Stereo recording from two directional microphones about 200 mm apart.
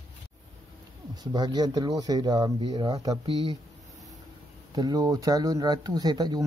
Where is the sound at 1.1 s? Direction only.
20° right (ahead or behind).